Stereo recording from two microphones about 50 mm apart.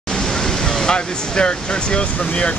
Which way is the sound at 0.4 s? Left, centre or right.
Centre.